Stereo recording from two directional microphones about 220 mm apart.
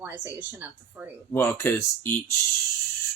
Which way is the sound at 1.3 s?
10° left (ahead or behind).